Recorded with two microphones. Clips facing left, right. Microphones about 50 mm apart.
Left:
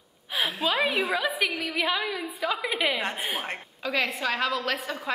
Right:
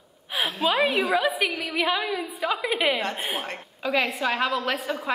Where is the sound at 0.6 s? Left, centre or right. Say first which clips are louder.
Right 4 dB; centre.